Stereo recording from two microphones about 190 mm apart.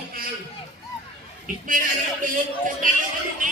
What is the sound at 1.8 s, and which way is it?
Speech, 45° right (ahead or behind).